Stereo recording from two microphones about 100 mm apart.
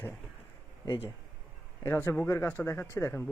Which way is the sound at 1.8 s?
20° left (ahead or behind).